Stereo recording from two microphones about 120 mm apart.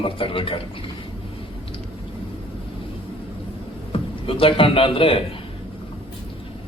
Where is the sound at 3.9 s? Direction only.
50° left (ahead or behind).